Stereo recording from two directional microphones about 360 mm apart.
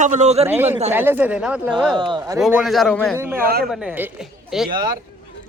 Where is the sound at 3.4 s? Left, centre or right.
Right.